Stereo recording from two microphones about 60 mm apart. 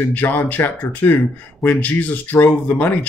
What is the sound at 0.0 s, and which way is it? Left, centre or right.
Speech, left.